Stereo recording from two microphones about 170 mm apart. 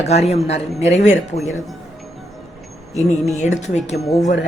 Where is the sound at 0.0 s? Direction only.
40° left (ahead or behind).